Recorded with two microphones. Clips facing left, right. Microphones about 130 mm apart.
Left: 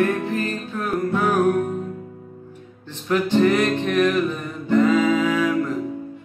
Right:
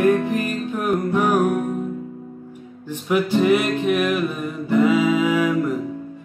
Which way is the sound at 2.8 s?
10° right (ahead or behind).